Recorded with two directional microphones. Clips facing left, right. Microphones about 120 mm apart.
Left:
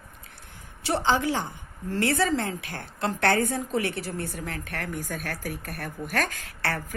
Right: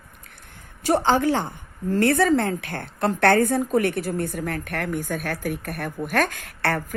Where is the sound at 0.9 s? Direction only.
50° right (ahead or behind).